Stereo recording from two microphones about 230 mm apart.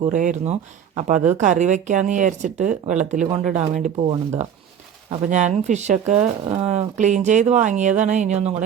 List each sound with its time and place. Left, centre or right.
0.1 s speech: right